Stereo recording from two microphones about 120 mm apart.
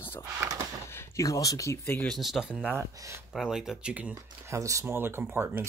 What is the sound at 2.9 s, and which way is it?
Speech, 25° right (ahead or behind).